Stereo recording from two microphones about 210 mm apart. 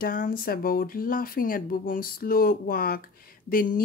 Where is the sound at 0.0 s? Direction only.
40° left (ahead or behind).